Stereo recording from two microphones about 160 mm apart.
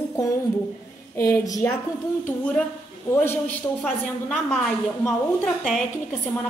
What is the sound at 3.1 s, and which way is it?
Speech, 15° left (ahead or behind).